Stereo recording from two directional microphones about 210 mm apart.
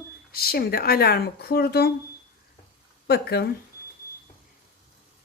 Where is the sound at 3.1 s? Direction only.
50° left (ahead or behind).